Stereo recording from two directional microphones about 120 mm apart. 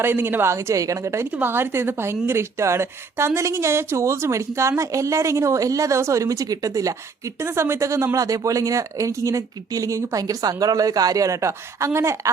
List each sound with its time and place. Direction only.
0.0 s a woman's voice: 15° right (ahead or behind)